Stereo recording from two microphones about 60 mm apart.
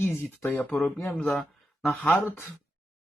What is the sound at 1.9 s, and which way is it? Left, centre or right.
Speech, left.